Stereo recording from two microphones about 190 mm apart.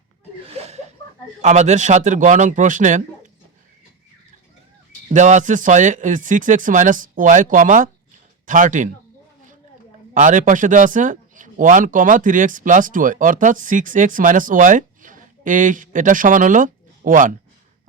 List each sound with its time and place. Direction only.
0.4 s a sound: 30° right (ahead or behind)
1.4 s a man's voice: 35° right (ahead or behind)
5.1 s speech: 40° right (ahead or behind)
10.2 s speech: 40° right (ahead or behind)